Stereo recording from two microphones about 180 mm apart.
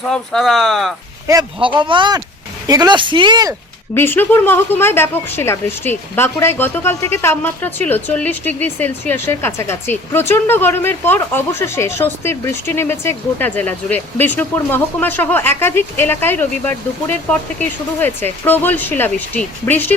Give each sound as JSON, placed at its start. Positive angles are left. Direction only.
{"t": 0.1, "sound": "speech", "side_deg": 0}
{"t": 1.3, "sound": "speech", "side_deg": -25}
{"t": 3.9, "sound": "a woman's voice", "side_deg": 10}